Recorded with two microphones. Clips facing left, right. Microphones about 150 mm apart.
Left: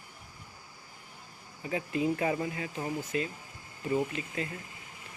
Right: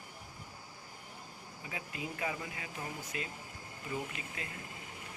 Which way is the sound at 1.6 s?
40° left (ahead or behind).